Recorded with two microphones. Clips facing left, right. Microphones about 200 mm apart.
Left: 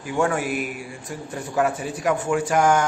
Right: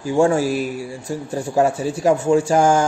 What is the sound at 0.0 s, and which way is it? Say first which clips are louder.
A man's voice: right 7 dB; 30° right (ahead or behind).